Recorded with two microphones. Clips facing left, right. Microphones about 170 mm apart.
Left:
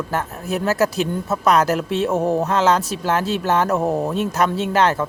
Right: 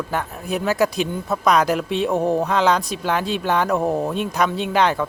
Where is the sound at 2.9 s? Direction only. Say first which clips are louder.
Left 1 dB; 40° left (ahead or behind).